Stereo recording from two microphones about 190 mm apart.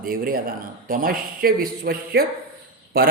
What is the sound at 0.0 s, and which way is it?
Speech, 50° right (ahead or behind).